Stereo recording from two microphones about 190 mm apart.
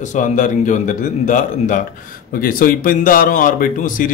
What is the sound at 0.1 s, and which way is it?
A man's voice, 40° left (ahead or behind).